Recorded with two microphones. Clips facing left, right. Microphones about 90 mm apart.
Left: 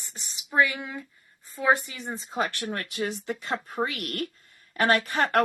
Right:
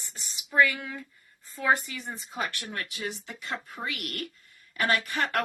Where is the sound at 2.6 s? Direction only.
45° left (ahead or behind).